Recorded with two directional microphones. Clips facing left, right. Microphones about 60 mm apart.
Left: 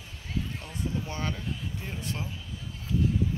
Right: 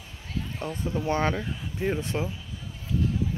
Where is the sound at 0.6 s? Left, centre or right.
Right.